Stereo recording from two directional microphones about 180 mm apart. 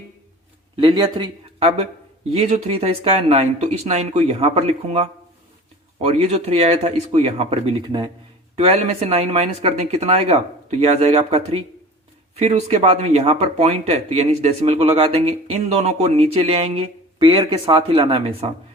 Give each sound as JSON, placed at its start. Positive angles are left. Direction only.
{"t": 0.8, "sound": "speech", "side_deg": -25}